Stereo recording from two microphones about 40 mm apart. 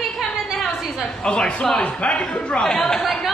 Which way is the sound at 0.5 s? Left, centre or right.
Centre.